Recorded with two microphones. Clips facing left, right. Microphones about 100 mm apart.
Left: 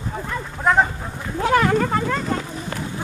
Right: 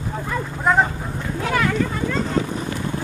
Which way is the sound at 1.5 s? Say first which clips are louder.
Left 4 dB; 45° left (ahead or behind).